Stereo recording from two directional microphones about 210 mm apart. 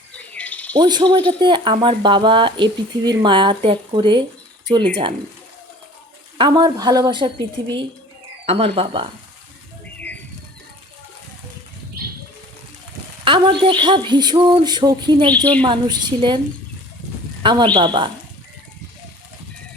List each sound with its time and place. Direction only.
0.3 s bird: 5° left (ahead or behind)
0.7 s speech: 20° right (ahead or behind)
6.3 s speech: 20° right (ahead or behind)
13.2 s speech: 20° right (ahead or behind)
17.4 s a woman's voice: 25° right (ahead or behind)